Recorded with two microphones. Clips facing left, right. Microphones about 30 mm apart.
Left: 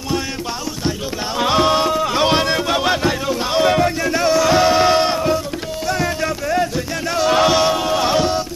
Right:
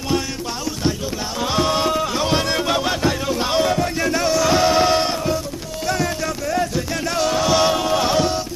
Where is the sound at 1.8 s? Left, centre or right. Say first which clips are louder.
Left 2 dB; centre.